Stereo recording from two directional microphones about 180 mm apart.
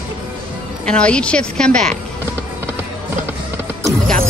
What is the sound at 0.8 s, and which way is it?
Speech, 5° left (ahead or behind).